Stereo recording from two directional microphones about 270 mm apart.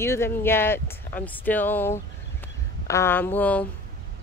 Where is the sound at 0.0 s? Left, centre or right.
Centre.